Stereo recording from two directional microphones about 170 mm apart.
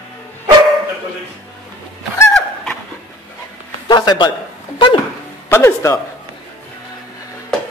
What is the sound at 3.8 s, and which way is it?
Speech, 25° left (ahead or behind).